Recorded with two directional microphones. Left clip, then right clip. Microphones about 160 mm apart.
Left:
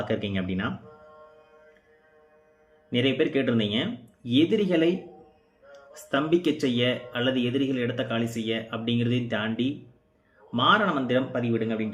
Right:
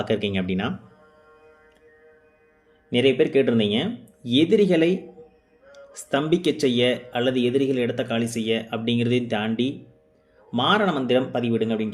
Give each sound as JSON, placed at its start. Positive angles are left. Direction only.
{"t": 0.0, "sound": "speech", "side_deg": -35}
{"t": 2.9, "sound": "speech", "side_deg": -35}
{"t": 6.1, "sound": "speech", "side_deg": -35}